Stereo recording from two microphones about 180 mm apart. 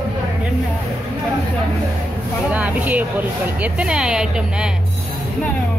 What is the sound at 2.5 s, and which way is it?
Speech, 10° right (ahead or behind).